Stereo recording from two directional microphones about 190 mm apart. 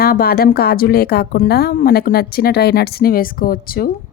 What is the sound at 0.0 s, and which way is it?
A woman's voice, 50° left (ahead or behind).